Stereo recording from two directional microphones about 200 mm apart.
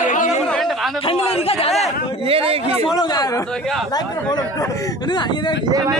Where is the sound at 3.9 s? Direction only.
20° left (ahead or behind).